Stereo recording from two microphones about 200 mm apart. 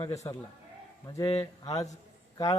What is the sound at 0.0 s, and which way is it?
A man's voice, 15° left (ahead or behind).